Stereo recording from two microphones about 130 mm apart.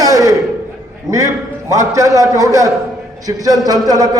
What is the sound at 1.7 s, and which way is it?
A man's voice, 25° right (ahead or behind).